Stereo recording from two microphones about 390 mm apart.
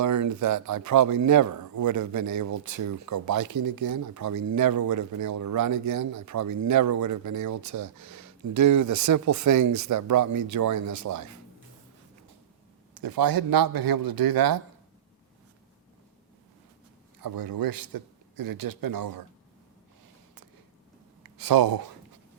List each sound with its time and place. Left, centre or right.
0.0 s a man's voice: right
13.0 s a man's voice: right
17.2 s a man's voice: right
21.2 s speech: right